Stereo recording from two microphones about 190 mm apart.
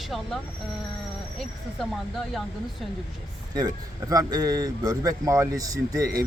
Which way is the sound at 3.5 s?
20° right (ahead or behind).